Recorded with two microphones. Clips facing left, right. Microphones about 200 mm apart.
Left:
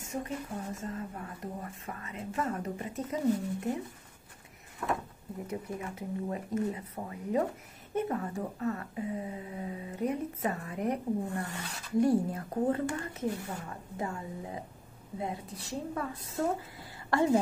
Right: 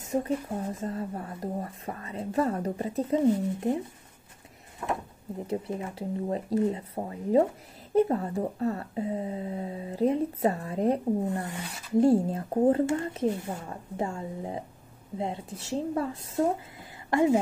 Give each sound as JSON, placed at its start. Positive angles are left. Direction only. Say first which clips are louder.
{"t": 0.0, "sound": "speech", "louder": "right 8 dB", "side_deg": -35}
{"t": 4.8, "sound": "a woman's voice", "louder": "right 1 dB", "side_deg": -20}
{"t": 5.5, "sound": "a woman's voice", "louder": "right 6 dB", "side_deg": -30}
{"t": 17.1, "sound": "a woman's voice", "louder": "right 3 dB", "side_deg": -15}